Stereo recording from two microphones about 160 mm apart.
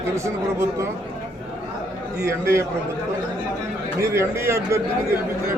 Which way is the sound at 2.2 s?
15° right (ahead or behind).